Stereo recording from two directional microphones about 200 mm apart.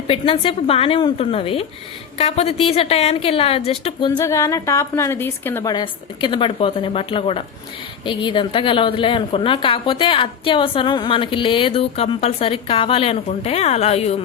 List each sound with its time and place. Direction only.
0.1 s a woman's voice: 25° left (ahead or behind)
4.1 s a woman's voice: 15° left (ahead or behind); by 14.3 s 30° left (ahead or behind)